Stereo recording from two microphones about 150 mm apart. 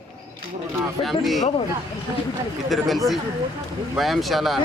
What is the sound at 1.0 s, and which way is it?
Speech, centre (ahead or behind).